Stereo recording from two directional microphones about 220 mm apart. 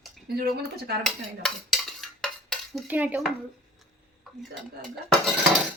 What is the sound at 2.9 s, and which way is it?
Speech, 10° right (ahead or behind).